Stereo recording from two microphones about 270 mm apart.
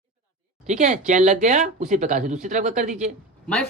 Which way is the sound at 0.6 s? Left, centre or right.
Right.